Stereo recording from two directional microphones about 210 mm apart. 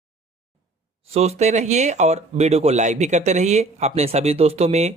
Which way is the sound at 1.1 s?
30° right (ahead or behind).